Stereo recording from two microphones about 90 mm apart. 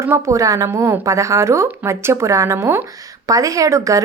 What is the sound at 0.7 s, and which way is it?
A woman's voice, 25° right (ahead or behind).